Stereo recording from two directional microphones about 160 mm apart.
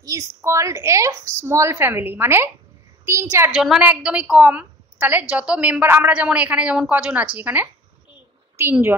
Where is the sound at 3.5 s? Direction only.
5° right (ahead or behind).